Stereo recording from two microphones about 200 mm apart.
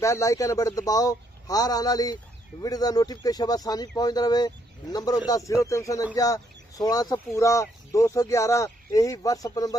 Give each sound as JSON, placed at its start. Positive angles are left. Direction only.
{"t": 0.0, "sound": "speech", "side_deg": 15}